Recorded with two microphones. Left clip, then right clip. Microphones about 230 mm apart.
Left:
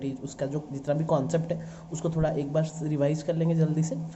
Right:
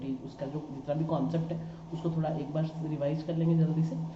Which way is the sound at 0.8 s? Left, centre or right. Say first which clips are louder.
Left 6 dB; left.